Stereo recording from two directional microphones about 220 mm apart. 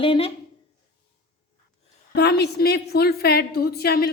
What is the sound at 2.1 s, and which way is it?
A woman's voice, 50° left (ahead or behind).